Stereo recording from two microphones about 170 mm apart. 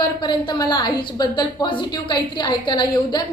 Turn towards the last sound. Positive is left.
turn(degrees=25)  # may be behind; listen again after turning